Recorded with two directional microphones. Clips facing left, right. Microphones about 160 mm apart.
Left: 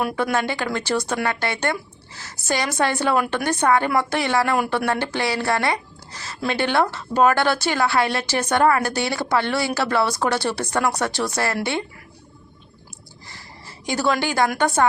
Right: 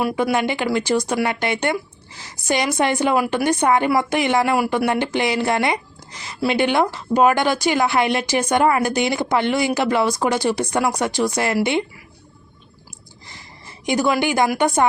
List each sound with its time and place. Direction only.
0.2 s speech: 15° right (ahead or behind)
13.2 s speech: 20° right (ahead or behind)